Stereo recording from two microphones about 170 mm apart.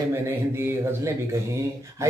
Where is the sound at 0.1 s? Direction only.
15° right (ahead or behind).